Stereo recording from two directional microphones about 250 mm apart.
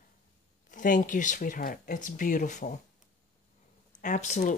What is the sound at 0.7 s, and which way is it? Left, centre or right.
Speech, left.